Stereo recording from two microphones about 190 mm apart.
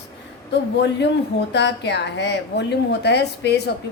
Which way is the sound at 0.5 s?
65° left (ahead or behind).